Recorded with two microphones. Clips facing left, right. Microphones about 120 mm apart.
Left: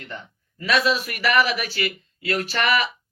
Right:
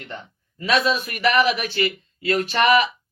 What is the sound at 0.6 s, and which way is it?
Speech, 20° right (ahead or behind).